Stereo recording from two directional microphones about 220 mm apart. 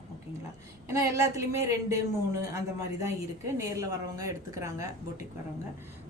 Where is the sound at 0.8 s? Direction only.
15° right (ahead or behind).